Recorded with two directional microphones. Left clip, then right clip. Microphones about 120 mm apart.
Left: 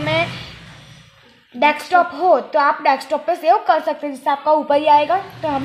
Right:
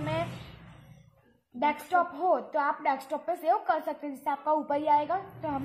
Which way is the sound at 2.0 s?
45° left (ahead or behind).